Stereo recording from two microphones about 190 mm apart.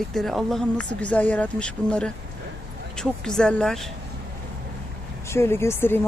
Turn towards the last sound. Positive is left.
turn(degrees=10)  # may be behind; listen again after turning